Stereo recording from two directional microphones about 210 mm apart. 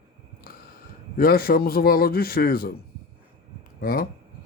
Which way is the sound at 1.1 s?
45° left (ahead or behind).